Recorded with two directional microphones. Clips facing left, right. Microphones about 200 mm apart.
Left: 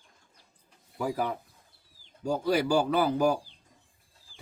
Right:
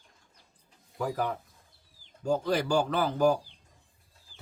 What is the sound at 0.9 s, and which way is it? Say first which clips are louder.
A man's voice: left 1 dB; 10° left (ahead or behind).